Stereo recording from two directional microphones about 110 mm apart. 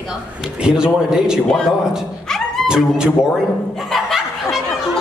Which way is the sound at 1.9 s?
5° left (ahead or behind).